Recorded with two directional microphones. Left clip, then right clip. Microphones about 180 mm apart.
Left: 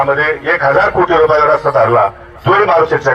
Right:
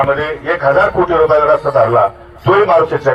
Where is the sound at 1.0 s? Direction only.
15° left (ahead or behind).